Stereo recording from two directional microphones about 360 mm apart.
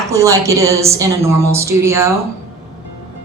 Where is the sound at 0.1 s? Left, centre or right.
Centre.